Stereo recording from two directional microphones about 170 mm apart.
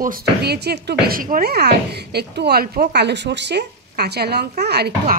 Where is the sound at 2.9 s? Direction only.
85° right.